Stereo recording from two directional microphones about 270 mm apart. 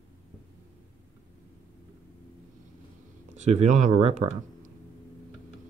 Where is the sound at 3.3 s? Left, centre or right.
Right.